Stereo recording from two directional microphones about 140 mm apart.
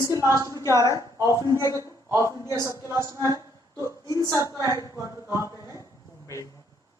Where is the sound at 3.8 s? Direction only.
25° left (ahead or behind).